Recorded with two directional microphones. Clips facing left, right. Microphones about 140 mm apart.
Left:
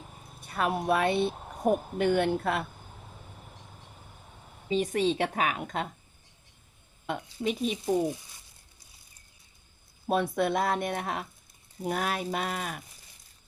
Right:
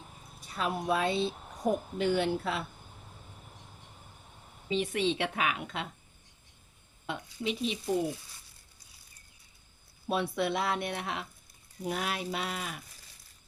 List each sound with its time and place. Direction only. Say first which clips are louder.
0.3 s speech: left 4 dB; 60° left (ahead or behind)
4.7 s a woman's voice: left 3 dB; 40° left (ahead or behind)
7.1 s a woman's voice: left 4 dB; 45° left (ahead or behind)
10.1 s a woman's voice: left 4 dB; 45° left (ahead or behind)